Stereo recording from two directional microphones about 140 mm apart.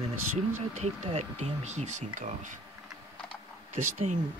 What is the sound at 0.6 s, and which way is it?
Speech, 55° right (ahead or behind).